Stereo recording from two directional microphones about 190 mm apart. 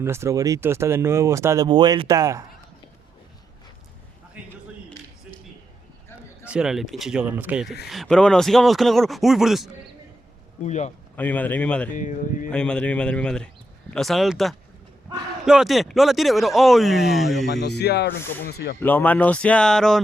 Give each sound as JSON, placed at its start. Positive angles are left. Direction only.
{"t": 0.0, "sound": "speech", "side_deg": -15}
{"t": 4.4, "sound": "a sound", "side_deg": -5}
{"t": 6.5, "sound": "speech", "side_deg": -5}
{"t": 10.6, "sound": "speech", "side_deg": 40}
{"t": 11.2, "sound": "speech", "side_deg": 10}
{"t": 11.9, "sound": "speech", "side_deg": 45}
{"t": 12.5, "sound": "speech", "side_deg": 5}
{"t": 17.5, "sound": "speech", "side_deg": 60}
{"t": 18.8, "sound": "speech", "side_deg": 10}